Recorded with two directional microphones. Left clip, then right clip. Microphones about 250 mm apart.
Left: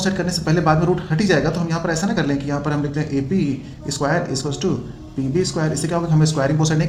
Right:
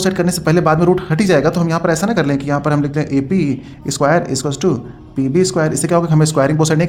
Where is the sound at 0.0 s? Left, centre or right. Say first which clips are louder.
Right 6 dB; right.